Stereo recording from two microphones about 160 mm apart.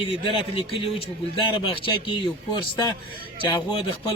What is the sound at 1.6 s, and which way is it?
Speech, 30° left (ahead or behind).